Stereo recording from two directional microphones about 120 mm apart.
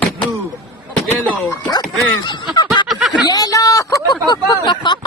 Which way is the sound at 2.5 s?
40° left (ahead or behind).